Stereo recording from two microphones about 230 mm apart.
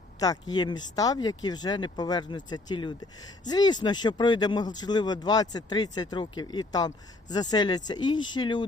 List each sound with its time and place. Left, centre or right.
0.2 s speech: centre